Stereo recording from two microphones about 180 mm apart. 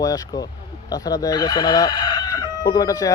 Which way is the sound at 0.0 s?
20° left (ahead or behind).